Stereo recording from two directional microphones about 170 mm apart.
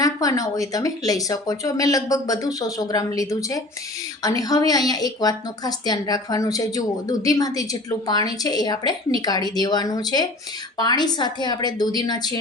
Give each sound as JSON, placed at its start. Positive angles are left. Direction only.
{"t": 0.0, "sound": "a woman's voice", "side_deg": 20}